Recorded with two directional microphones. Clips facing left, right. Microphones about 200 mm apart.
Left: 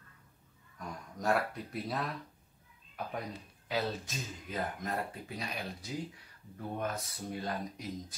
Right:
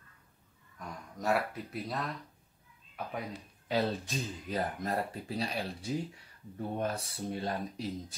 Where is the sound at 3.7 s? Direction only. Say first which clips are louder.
Right 4 dB; 35° right (ahead or behind).